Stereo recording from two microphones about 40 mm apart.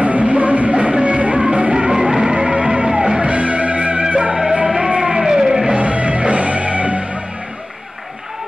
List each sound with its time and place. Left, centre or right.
0.0 s music: right; by 5.8 s centre
5.8 s music: right